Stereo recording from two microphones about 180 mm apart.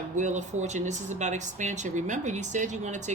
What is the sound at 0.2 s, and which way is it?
Speech, 40° right (ahead or behind).